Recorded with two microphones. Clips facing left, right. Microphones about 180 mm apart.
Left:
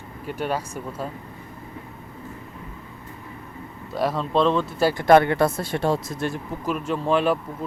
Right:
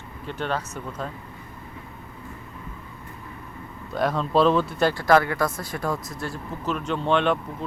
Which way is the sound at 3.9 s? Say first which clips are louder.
Even; centre (ahead or behind).